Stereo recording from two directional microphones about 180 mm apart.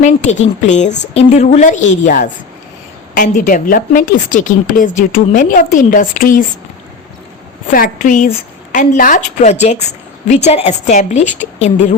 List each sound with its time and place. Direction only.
0.0 s a woman's voice: 40° left (ahead or behind)
7.7 s a woman's voice: 50° left (ahead or behind)